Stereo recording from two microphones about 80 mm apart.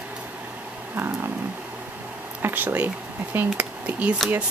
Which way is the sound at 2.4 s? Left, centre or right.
Right.